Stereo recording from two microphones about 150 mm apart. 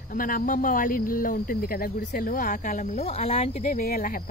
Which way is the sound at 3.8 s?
70° left (ahead or behind).